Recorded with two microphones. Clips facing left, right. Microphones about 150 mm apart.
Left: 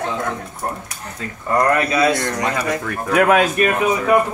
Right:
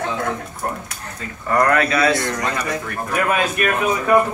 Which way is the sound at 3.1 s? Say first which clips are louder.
Left 6 dB; 85° left.